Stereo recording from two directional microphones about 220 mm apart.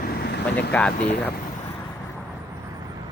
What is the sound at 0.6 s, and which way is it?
Speech, 5° left (ahead or behind).